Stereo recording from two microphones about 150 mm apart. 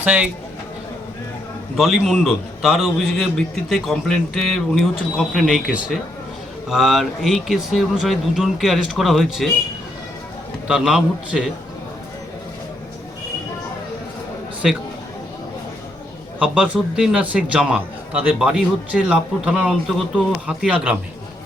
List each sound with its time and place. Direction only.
0.0 s a man's voice: 10° right (ahead or behind)
1.7 s a man's voice: centre (ahead or behind)
10.7 s a man's voice: centre (ahead or behind)
16.4 s a man's voice: 5° right (ahead or behind)